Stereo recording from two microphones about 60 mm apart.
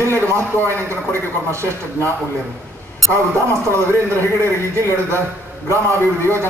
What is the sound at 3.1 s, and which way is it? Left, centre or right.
A man's voice, right.